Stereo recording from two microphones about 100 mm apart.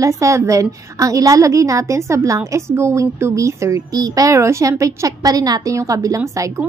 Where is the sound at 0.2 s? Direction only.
30° right (ahead or behind).